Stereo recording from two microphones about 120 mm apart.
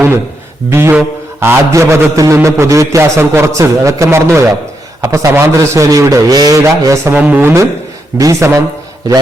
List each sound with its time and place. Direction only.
0.7 s a man's voice: 20° right (ahead or behind)